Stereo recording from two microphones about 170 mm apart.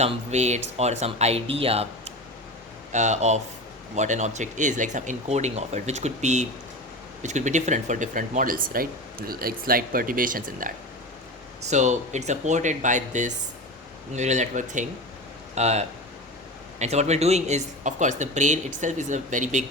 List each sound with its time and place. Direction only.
0.0 s speech: 40° right (ahead or behind)
11.7 s speech: 45° right (ahead or behind)